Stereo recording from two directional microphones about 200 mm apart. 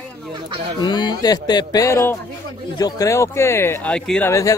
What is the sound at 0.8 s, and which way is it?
A man's voice, 20° left (ahead or behind).